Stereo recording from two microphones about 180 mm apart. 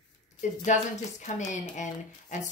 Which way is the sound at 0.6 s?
45° left (ahead or behind).